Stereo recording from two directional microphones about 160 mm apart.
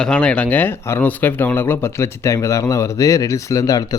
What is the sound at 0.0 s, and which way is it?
Speech, 5° left (ahead or behind).